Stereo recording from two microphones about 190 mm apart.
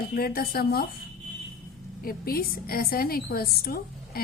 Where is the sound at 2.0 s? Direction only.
50° left (ahead or behind).